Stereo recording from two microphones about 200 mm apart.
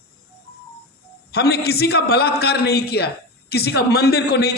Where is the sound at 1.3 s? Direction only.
50° left (ahead or behind).